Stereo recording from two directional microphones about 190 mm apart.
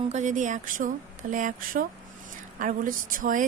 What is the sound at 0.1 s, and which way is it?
Speech, 40° right (ahead or behind).